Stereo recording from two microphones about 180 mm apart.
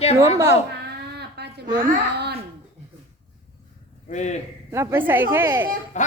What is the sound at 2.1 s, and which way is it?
Speech, 65° right (ahead or behind).